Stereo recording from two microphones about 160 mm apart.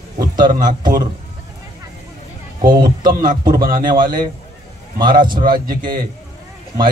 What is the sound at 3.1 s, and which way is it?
Speech, 60° right (ahead or behind).